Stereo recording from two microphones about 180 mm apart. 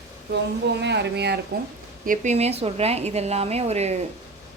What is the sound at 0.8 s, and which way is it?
Speech, 70° right (ahead or behind).